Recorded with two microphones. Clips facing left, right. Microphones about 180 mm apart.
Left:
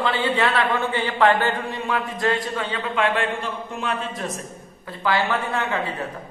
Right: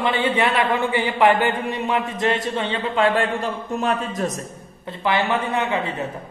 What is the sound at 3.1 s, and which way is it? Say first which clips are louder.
A man's voice: right 3 dB; 40° right (ahead or behind).